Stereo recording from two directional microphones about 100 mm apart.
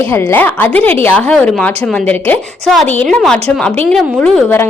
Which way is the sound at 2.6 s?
Centre (ahead or behind).